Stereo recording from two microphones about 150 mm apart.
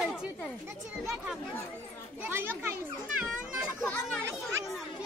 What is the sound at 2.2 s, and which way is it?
A child's voice, 15° right (ahead or behind).